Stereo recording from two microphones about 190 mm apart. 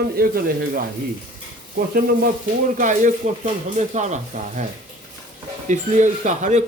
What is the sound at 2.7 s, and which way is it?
Speech, 40° right (ahead or behind).